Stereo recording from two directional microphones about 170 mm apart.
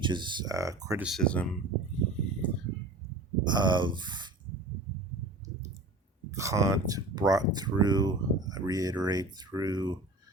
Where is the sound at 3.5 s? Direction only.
25° right (ahead or behind).